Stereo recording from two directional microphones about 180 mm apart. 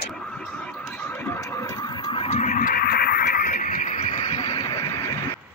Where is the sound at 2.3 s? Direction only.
40° left (ahead or behind).